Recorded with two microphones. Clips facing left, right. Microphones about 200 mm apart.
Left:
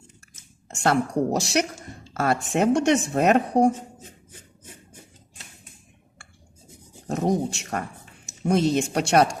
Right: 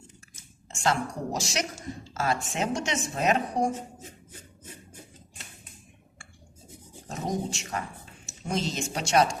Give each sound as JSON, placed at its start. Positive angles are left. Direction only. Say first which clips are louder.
{"t": 0.8, "sound": "speech", "louder": "left 6 dB", "side_deg": 60}
{"t": 7.1, "sound": "speech", "louder": "left 8 dB", "side_deg": 60}